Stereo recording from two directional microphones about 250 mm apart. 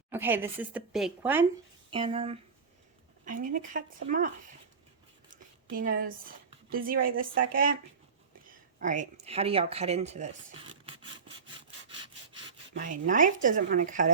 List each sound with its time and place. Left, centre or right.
0.1 s speech: centre
1.9 s a woman's voice: right
8.8 s speech: right
12.8 s speech: right